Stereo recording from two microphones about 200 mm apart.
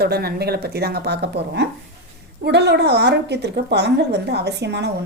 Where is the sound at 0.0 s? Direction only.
50° right (ahead or behind).